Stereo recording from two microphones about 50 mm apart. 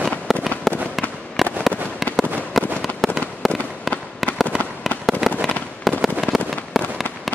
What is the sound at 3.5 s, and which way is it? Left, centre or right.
Fireworks, left.